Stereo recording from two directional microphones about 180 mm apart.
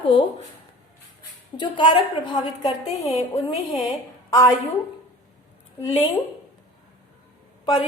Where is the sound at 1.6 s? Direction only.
25° left (ahead or behind).